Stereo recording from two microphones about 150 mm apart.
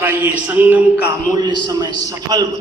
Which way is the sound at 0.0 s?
15° right (ahead or behind).